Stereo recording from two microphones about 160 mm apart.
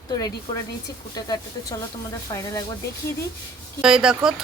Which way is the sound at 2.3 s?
20° left (ahead or behind).